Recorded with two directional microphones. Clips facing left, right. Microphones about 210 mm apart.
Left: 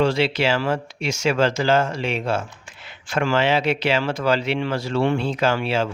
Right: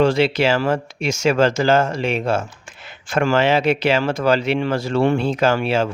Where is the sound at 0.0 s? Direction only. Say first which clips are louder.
Right 3 dB; 45° right (ahead or behind).